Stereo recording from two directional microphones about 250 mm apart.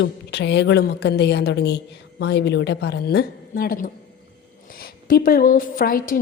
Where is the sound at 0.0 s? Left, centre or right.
Left.